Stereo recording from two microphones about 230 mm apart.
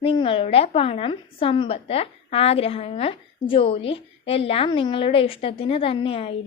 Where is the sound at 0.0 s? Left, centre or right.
Left.